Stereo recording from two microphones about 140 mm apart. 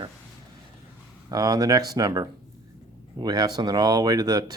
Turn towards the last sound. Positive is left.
turn(degrees=-25)  # may be behind; listen again after turning